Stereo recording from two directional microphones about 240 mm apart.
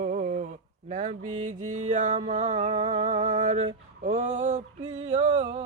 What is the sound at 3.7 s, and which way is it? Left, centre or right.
Male singing, right.